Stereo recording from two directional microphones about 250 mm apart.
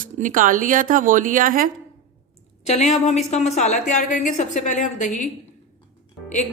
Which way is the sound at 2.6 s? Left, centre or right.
Left.